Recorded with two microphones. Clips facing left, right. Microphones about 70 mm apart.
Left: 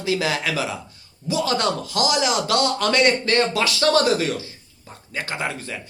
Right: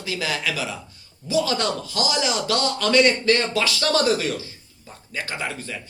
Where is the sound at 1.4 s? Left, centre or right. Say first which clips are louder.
Left 2 dB; left.